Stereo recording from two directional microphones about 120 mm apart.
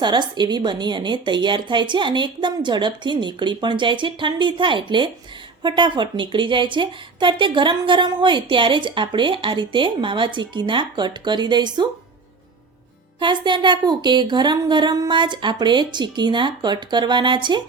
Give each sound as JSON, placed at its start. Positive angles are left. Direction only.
{"t": 0.0, "sound": "a woman's voice", "side_deg": -40}
{"t": 13.1, "sound": "a woman's voice", "side_deg": -40}